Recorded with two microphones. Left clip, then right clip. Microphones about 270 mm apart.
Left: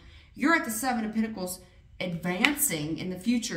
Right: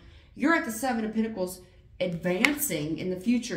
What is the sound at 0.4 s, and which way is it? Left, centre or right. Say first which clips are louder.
Speech: even; left.